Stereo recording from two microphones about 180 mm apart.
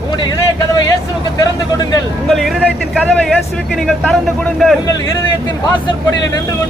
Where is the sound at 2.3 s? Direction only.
Centre (ahead or behind).